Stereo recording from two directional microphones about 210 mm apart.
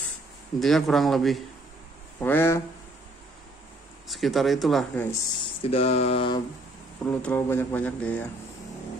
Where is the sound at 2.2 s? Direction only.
10° left (ahead or behind).